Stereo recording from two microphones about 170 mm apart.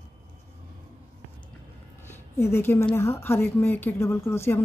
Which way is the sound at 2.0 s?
15° left (ahead or behind).